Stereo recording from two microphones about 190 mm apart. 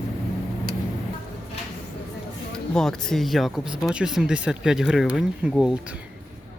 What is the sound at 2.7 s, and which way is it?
Speech, centre (ahead or behind).